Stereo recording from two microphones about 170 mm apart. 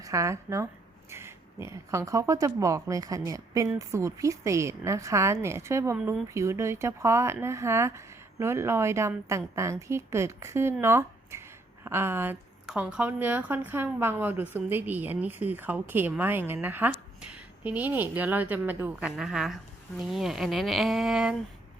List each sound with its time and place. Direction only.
0.0 s speech: 20° right (ahead or behind); by 21.3 s 5° right (ahead or behind)